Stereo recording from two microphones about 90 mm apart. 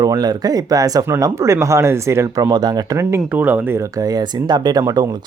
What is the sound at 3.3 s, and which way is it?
Speech, 20° right (ahead or behind).